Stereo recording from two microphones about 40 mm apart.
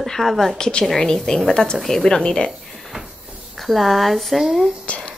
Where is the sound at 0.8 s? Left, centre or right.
Centre.